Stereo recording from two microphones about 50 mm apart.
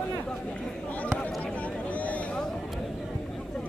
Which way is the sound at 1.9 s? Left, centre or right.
Left.